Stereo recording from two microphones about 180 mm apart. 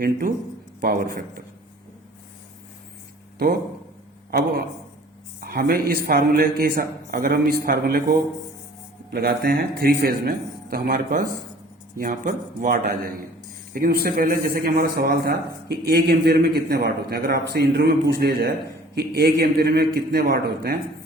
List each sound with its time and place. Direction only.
0.0 s a man's voice: 50° right (ahead or behind)
3.3 s a man's voice: 60° right (ahead or behind)